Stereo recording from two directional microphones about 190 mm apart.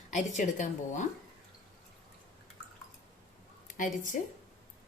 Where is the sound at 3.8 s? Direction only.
45° left (ahead or behind).